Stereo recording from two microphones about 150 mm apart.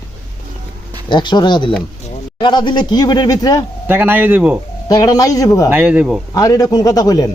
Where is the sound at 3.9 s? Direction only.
15° right (ahead or behind).